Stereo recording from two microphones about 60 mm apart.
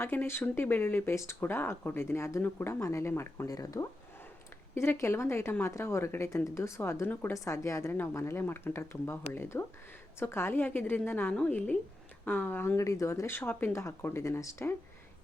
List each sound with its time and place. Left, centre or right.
0.1 s speech: left
1.1 s speech: left
1.4 s speech: left
2.0 s speech: left
3.4 s speech: left
4.7 s speech: left
7.1 s speech: left
7.3 s a woman's voice: left
12.8 s speech: left